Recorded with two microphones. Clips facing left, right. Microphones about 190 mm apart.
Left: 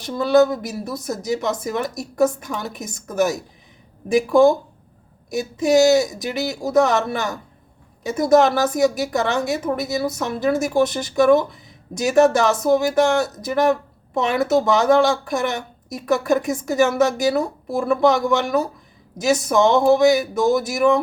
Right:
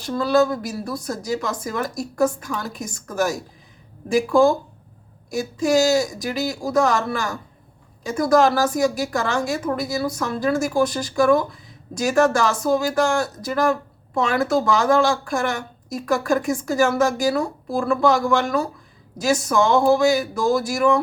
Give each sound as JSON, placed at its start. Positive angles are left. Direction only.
{"t": 0.0, "sound": "speech", "side_deg": 20}